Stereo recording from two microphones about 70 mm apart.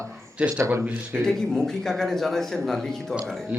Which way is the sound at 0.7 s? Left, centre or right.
Right.